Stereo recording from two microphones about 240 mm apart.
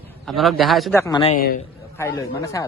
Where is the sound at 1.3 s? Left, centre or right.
Left.